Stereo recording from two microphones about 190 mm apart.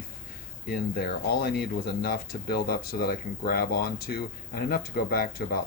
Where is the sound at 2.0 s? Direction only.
55° left (ahead or behind).